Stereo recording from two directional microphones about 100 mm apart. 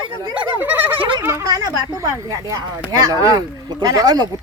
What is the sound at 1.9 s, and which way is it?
A woman's voice, 30° right (ahead or behind).